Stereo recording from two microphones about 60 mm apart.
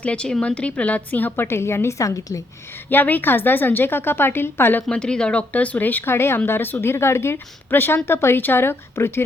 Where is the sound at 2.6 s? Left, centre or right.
Left.